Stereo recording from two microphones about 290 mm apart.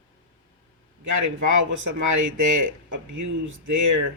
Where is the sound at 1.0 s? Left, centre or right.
Right.